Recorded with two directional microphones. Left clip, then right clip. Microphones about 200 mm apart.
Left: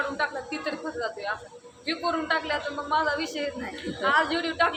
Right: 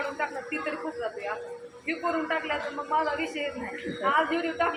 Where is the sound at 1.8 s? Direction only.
20° left (ahead or behind).